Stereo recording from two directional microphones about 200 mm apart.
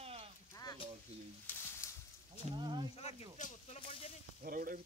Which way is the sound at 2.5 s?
25° right (ahead or behind).